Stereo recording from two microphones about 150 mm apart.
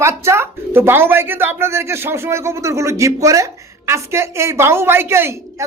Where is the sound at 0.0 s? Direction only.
15° right (ahead or behind).